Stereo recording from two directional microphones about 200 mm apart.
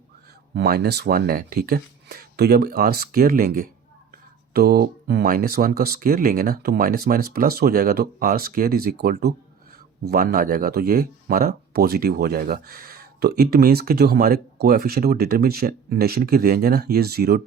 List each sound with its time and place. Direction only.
0.5 s speech: 50° right (ahead or behind)